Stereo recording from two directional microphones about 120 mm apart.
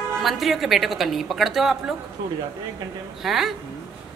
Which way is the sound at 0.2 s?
Centre (ahead or behind).